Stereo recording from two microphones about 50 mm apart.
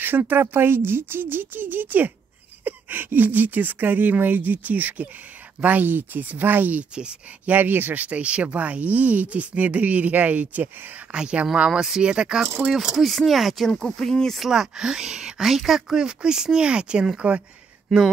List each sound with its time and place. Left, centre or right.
0.0 s speech: right
11.1 s speech: centre
12.7 s speech: centre
13.7 s speech: centre
14.4 s speech: centre
16.0 s speech: centre
17.9 s speech: centre